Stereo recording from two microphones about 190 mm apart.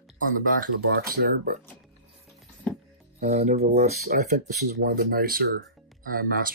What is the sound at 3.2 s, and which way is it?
Speech, 35° right (ahead or behind).